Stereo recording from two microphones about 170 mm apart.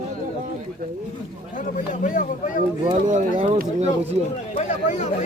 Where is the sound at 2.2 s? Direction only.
50° left (ahead or behind).